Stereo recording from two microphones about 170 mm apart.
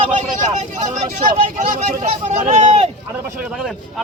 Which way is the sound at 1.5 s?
50° right (ahead or behind).